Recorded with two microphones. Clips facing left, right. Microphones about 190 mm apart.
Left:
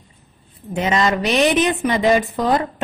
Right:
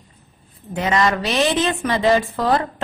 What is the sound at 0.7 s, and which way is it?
A woman's voice, 20° left (ahead or behind).